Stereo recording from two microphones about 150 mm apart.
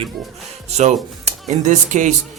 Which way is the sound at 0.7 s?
45° right (ahead or behind).